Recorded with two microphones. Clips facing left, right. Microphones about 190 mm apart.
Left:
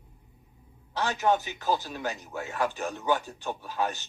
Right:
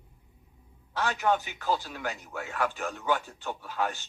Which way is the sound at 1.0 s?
20° left (ahead or behind).